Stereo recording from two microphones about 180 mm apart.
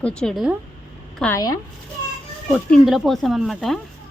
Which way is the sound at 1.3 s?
20° left (ahead or behind).